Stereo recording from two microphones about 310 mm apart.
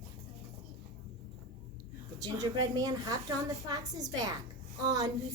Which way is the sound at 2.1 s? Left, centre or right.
Centre.